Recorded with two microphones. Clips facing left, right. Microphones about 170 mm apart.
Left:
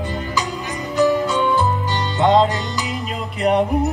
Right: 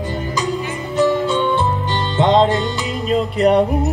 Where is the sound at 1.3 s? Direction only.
30° right (ahead or behind).